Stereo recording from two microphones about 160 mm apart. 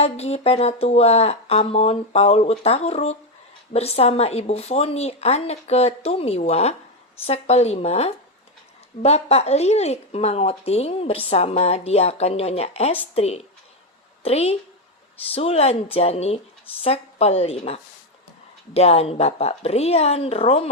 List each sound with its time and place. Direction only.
0.0 s speech: 40° left (ahead or behind)